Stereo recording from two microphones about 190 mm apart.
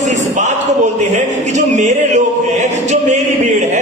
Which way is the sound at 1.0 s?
40° right (ahead or behind).